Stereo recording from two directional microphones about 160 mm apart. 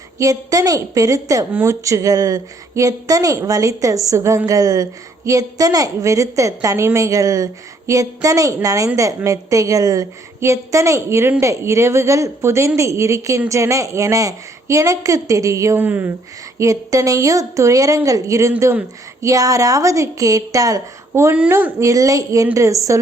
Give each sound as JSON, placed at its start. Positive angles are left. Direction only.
{"t": 0.2, "sound": "speech", "side_deg": -20}